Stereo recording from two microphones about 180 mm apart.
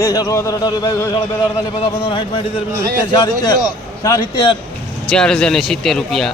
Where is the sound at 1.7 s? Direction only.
30° left (ahead or behind).